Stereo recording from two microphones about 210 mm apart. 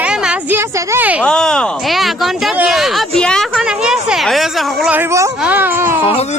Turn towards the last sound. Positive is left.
turn(degrees=30)  # may be behind; listen again after turning